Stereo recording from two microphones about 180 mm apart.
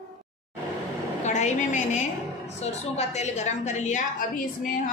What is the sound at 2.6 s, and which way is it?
A woman's voice, 40° left (ahead or behind).